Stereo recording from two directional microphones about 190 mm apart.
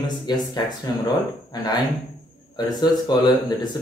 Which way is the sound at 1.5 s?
20° left (ahead or behind).